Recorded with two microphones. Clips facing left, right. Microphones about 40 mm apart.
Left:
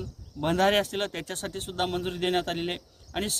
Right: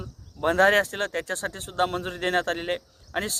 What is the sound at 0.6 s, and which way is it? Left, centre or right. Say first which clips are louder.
Speech: right 4 dB; left.